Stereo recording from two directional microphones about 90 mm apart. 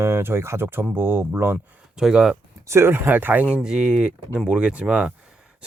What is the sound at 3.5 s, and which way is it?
Speech, 10° right (ahead or behind).